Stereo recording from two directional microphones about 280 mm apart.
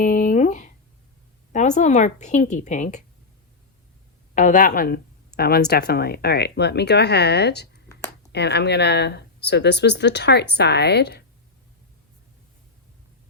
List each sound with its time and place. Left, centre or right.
0.0 s a sound: left
1.5 s speech: left
4.4 s speech: left